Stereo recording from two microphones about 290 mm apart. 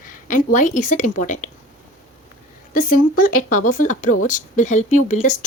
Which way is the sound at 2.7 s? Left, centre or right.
Left.